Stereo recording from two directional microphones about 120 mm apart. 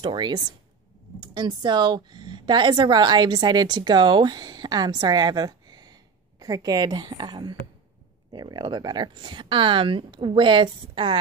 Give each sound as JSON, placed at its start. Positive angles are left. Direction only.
{"t": 0.0, "sound": "a woman's voice", "side_deg": -40}